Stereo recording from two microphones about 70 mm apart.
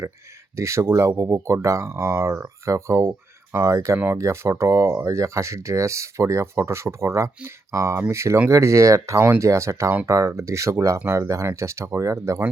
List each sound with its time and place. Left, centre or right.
0.5 s speech: right